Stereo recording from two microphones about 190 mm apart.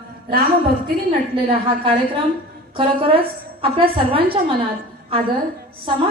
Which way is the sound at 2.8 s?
30° right (ahead or behind).